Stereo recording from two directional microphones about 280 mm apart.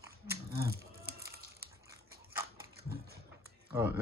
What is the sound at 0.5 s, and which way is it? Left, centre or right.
Cattle, right.